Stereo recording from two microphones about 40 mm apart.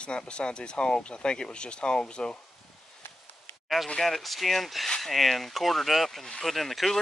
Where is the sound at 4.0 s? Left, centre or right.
Centre.